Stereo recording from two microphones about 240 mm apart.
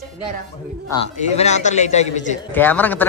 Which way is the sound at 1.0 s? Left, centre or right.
Left.